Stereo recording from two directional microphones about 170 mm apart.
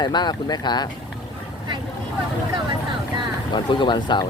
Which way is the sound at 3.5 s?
25° left (ahead or behind).